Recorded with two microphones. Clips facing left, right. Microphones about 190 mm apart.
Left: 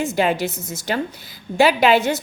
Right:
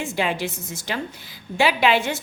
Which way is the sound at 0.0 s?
40° left (ahead or behind).